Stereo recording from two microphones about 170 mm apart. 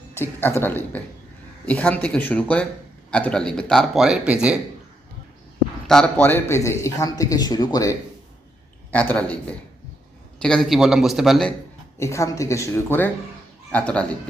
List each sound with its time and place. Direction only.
0.1 s speech: 15° left (ahead or behind); by 4.6 s 5° right (ahead or behind)
5.9 s speech: 5° left (ahead or behind)
8.9 s speech: 10° left (ahead or behind)
11.9 s speech: 15° left (ahead or behind)